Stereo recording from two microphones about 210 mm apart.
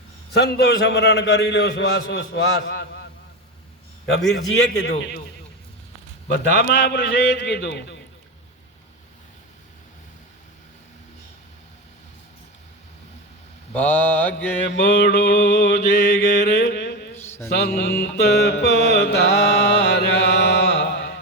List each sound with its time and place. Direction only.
0.3 s a man's voice: 50° left (ahead or behind)
4.4 s a man's voice: 60° left (ahead or behind)
6.3 s mantra: 50° left (ahead or behind)
13.7 s mantra: 10° left (ahead or behind)
14.8 s mantra: 45° left (ahead or behind)
17.2 s mantra: 10° left (ahead or behind)
17.7 s mantra: 50° left (ahead or behind)